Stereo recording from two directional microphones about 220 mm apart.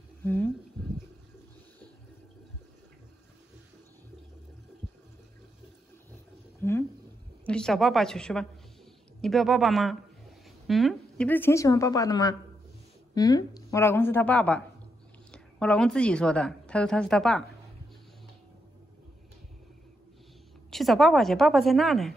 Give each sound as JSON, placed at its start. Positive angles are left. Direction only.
{"t": 0.2, "sound": "speech", "side_deg": 10}
{"t": 7.4, "sound": "a woman's voice", "side_deg": 5}
{"t": 20.7, "sound": "speech", "side_deg": 0}